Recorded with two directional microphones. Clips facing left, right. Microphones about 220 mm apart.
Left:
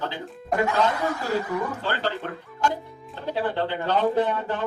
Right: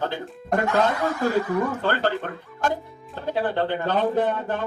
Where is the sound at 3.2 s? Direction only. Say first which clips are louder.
Right 2 dB; 50° right (ahead or behind).